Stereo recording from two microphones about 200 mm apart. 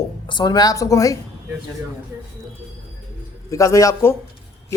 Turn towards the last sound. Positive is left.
turn(degrees=15)  # may be behind; listen again after turning